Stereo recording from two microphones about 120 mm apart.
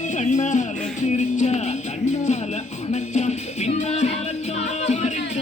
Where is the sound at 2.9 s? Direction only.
70° left (ahead or behind).